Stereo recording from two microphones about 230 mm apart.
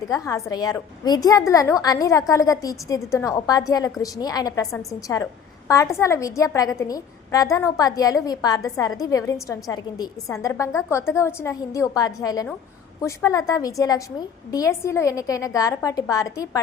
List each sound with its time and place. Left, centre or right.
0.1 s a woman's voice: centre